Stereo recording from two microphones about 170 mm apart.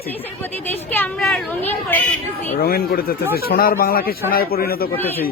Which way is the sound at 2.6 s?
65° left (ahead or behind).